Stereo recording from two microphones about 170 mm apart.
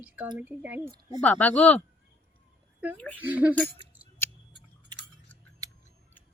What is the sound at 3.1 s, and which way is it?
Speech, 10° right (ahead or behind).